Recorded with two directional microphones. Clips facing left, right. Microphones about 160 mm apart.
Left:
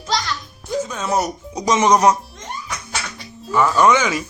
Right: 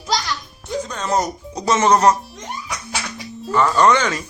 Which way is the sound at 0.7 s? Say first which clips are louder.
Left 1 dB; 5° left (ahead or behind).